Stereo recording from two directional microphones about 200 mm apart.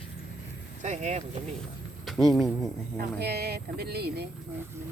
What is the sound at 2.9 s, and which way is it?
Speech, 50° right (ahead or behind).